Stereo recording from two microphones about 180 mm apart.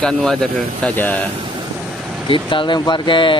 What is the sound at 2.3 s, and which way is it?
Speech, 25° left (ahead or behind).